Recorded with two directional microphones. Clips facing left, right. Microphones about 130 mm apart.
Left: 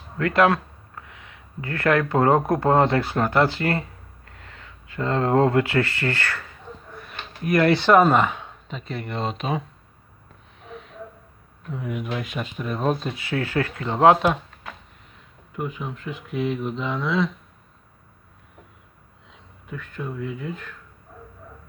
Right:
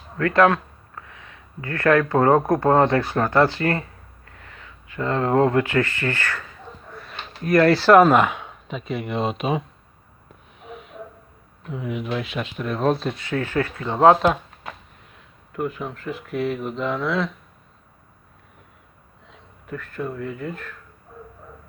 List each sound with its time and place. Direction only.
0.2 s a sound: 25° left (ahead or behind)
2.5 s speech: 25° left (ahead or behind)
7.0 s a sound: 20° left (ahead or behind)
7.8 s speech: 5° right (ahead or behind)
11.7 s speech: centre (ahead or behind)
15.5 s speech: centre (ahead or behind)
19.3 s speech: centre (ahead or behind)